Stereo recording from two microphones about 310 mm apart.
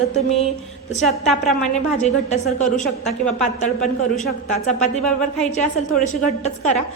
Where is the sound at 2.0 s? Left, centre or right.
Left.